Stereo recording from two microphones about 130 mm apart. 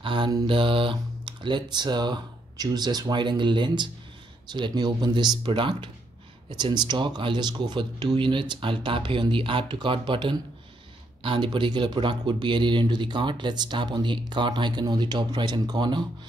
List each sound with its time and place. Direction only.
0.0 s mantra: 40° right (ahead or behind)
0.5 s speech: 40° right (ahead or behind)